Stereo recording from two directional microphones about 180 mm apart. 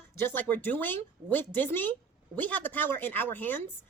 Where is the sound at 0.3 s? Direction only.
10° left (ahead or behind).